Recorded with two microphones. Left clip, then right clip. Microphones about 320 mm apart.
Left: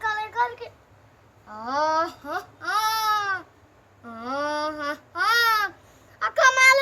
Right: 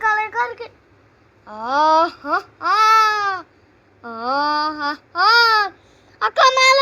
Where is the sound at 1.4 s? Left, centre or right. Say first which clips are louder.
Right 8 dB; centre.